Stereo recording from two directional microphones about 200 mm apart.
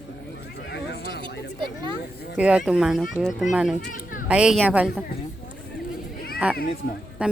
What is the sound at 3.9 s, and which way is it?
Children playing, 45° left (ahead or behind).